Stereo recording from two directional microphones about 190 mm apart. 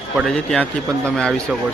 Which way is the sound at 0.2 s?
5° left (ahead or behind).